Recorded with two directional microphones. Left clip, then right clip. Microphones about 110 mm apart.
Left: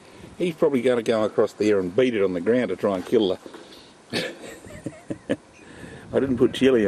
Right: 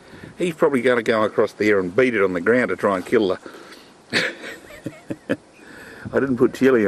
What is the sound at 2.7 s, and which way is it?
Speech, 25° left (ahead or behind).